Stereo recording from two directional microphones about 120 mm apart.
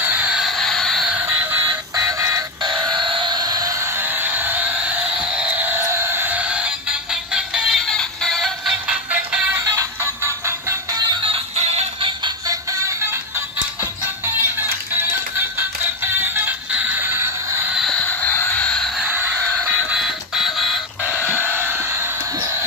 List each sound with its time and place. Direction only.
0.0 s a sound: 15° right (ahead or behind)
1.1 s music: 15° right (ahead or behind)
1.7 s music: 30° right (ahead or behind); by 9.6 s 10° right (ahead or behind)
9.6 s music: 25° right (ahead or behind)
11.0 s music: 45° right (ahead or behind); by 11.9 s 65° right (ahead or behind)
12.0 s music: 35° right (ahead or behind)
14.2 s music: 20° right (ahead or behind)
17.7 s a sound: centre (ahead or behind)
18.0 s a sound: 15° left (ahead or behind)
19.0 s fowl: 15° right (ahead or behind)
19.9 s alarm clock: 5° right (ahead or behind)
21.0 s chicken: 10° right (ahead or behind)